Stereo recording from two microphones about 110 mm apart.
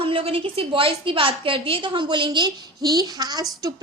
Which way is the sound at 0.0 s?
55° right (ahead or behind).